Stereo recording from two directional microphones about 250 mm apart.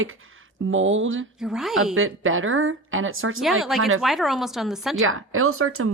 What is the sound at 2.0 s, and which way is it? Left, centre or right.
A woman's voice, right.